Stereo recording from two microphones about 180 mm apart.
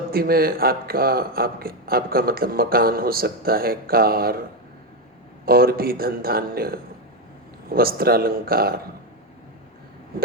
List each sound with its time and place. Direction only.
0.1 s speech: 55° right (ahead or behind)
5.5 s speech: 55° right (ahead or behind)